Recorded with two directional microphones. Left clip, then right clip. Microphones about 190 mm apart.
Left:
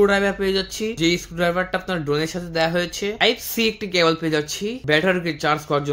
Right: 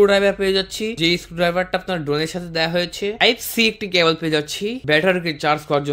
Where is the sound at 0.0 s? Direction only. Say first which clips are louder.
Right 3 dB; 25° right (ahead or behind).